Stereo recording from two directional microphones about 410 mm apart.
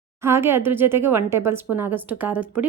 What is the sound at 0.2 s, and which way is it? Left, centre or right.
Speech, centre.